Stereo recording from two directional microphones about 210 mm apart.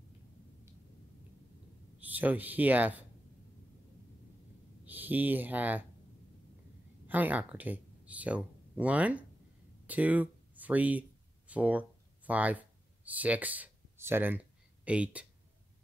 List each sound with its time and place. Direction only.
2.0 s speech: 10° right (ahead or behind)
4.8 s speech: 10° right (ahead or behind)
7.1 s speech: 10° right (ahead or behind)
9.8 s a sound: 5° right (ahead or behind)
12.3 s speech: 5° right (ahead or behind)